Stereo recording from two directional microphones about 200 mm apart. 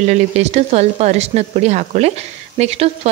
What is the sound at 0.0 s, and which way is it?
Speech, 35° right (ahead or behind).